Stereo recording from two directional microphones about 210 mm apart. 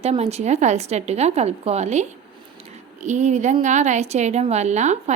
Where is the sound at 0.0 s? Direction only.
30° right (ahead or behind).